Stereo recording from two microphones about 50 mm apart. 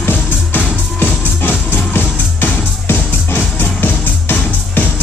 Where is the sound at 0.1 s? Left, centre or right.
Left.